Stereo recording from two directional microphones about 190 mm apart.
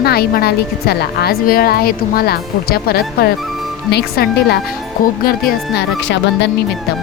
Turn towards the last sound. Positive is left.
turn(degrees=70)  # may be behind; listen again after turning